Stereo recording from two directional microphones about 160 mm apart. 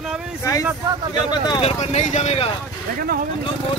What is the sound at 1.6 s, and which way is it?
Speech, 40° left (ahead or behind).